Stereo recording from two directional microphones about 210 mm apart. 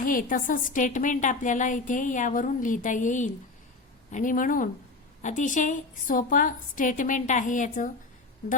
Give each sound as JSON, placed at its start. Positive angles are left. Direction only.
{"t": 0.0, "sound": "a woman's voice", "side_deg": 40}